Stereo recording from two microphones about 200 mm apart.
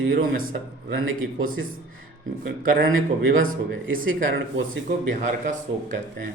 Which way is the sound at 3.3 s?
75° right (ahead or behind).